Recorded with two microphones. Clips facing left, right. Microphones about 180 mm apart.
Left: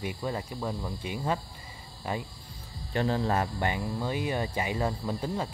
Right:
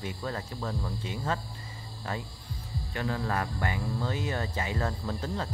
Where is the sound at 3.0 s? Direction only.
25° left (ahead or behind).